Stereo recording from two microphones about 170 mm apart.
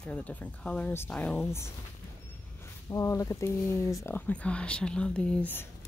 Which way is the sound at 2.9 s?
20° left (ahead or behind).